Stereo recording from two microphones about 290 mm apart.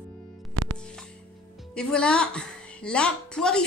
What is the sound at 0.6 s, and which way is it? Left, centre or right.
Music, right.